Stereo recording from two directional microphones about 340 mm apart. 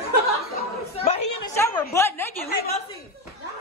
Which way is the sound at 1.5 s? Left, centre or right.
Centre.